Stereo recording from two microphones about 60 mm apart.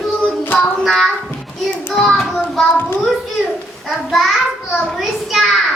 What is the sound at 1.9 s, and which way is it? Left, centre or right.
Child singing, centre.